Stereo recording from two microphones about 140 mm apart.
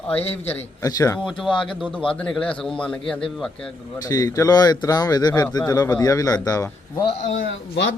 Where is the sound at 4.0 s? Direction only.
25° left (ahead or behind).